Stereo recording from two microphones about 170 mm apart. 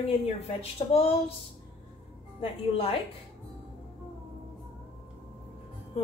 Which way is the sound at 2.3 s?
35° left (ahead or behind).